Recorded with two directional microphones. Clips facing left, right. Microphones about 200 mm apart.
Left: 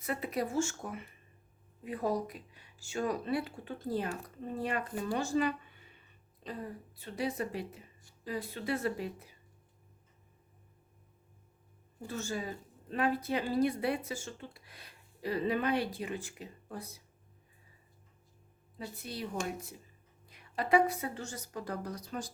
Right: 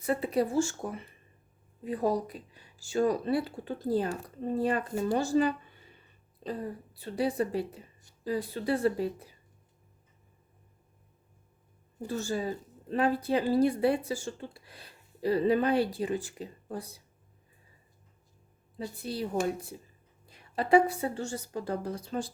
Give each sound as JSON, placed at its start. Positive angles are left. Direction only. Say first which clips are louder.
{"t": 0.0, "sound": "speech", "louder": "right 7 dB", "side_deg": -30}
{"t": 12.0, "sound": "speech", "louder": "right 6 dB", "side_deg": -35}
{"t": 18.9, "sound": "a woman's voice", "louder": "right 7 dB", "side_deg": -30}